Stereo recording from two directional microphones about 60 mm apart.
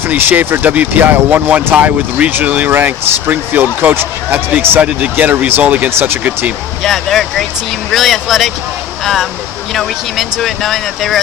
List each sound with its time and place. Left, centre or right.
0.1 s speech: right
6.8 s speech: centre
9.7 s speech: centre